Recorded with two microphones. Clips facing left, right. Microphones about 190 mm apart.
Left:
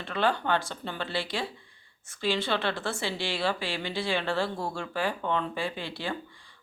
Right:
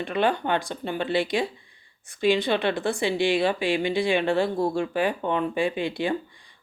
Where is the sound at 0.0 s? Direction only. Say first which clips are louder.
Right 4 dB; 15° right (ahead or behind).